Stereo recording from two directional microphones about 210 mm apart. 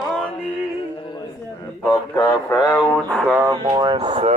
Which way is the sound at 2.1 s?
15° left (ahead or behind).